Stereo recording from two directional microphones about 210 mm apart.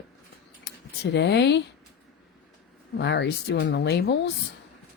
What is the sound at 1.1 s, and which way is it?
Speech, 55° left (ahead or behind).